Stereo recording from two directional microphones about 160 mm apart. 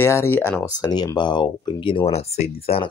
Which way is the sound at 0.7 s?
25° left (ahead or behind).